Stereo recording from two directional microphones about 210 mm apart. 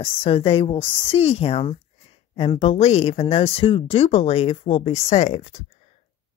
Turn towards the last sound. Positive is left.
turn(degrees=35)  # may be behind; listen again after turning